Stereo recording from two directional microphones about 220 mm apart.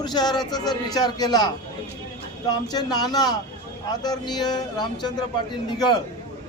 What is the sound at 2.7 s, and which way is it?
Speech, 20° left (ahead or behind).